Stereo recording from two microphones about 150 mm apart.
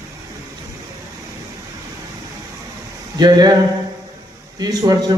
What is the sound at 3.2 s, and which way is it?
Speech, 25° right (ahead or behind).